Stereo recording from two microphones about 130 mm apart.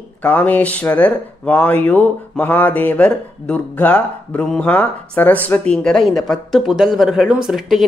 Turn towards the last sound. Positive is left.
turn(degrees=-5)  # may be behind; listen again after turning